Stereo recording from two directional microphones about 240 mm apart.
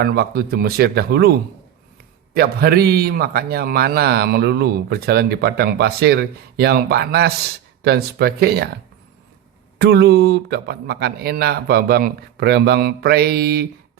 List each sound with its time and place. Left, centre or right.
0.0 s a man's voice: right
9.7 s a man's voice: right